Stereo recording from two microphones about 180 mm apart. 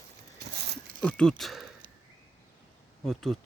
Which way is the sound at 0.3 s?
65° right (ahead or behind).